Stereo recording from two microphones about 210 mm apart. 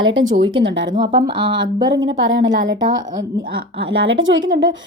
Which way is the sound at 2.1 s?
65° right (ahead or behind).